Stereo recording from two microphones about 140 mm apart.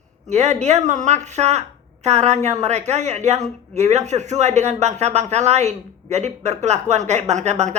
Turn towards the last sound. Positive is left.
turn(degrees=-55)  # may be behind; listen again after turning